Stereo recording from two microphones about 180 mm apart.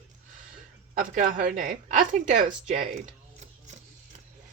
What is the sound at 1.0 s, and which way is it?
Speech, 45° right (ahead or behind).